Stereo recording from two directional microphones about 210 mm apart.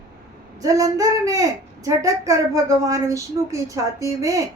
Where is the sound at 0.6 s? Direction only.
15° right (ahead or behind).